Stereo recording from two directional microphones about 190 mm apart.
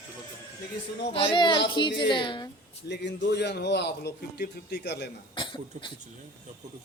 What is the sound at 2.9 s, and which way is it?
A man's voice, 65° left (ahead or behind).